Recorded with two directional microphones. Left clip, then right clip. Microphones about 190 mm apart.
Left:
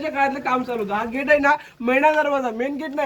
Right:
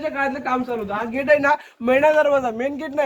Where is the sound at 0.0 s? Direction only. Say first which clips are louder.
Left 2 dB; 55° right (ahead or behind).